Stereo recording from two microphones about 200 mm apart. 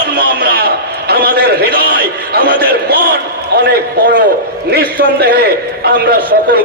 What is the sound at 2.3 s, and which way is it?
A man's voice, 50° right (ahead or behind).